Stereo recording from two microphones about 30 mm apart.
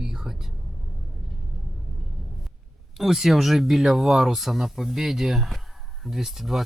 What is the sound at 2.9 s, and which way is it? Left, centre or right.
Speech, centre.